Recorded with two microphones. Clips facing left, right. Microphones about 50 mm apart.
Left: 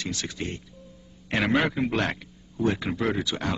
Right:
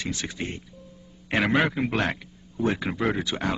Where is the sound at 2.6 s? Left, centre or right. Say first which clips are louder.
Even; centre.